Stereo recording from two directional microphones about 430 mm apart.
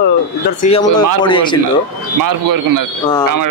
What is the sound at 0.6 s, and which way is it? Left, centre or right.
Speech, centre.